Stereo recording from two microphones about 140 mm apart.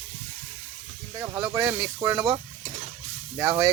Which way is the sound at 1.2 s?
5° right (ahead or behind).